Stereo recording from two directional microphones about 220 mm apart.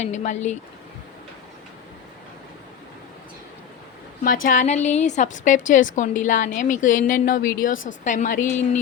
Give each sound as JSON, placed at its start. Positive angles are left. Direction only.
{"t": 0.0, "sound": "a woman's voice", "side_deg": 30}
{"t": 4.4, "sound": "a woman's voice", "side_deg": 35}